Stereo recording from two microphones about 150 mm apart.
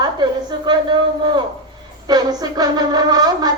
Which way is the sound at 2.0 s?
25° right (ahead or behind).